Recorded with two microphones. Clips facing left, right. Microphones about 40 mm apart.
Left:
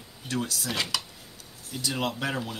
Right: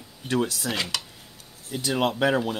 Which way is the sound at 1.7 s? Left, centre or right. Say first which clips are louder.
Right 5 dB; right.